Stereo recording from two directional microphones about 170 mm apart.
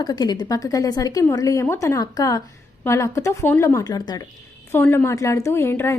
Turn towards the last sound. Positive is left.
turn(degrees=15)  # may be behind; listen again after turning